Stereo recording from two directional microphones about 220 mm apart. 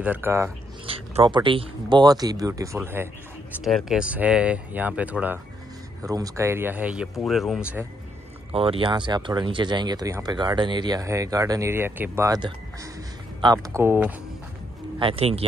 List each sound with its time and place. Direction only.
0.0 s speech: 10° right (ahead or behind)
0.8 s speech: 25° right (ahead or behind); by 7.8 s 5° right (ahead or behind)
8.5 s speech: 25° right (ahead or behind); by 14.1 s 10° right (ahead or behind)
15.0 s speech: 25° right (ahead or behind)